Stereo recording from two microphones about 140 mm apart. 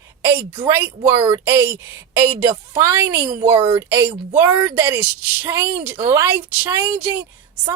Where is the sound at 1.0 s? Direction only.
30° right (ahead or behind).